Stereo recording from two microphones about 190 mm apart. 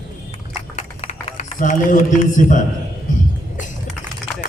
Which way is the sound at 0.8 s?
40° left (ahead or behind).